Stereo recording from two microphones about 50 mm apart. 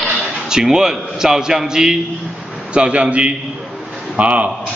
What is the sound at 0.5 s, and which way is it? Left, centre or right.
A man's voice, centre.